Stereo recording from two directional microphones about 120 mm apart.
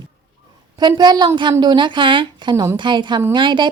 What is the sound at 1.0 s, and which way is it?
Speech, 40° right (ahead or behind).